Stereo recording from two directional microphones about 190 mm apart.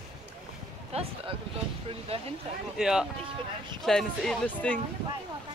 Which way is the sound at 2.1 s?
30° right (ahead or behind).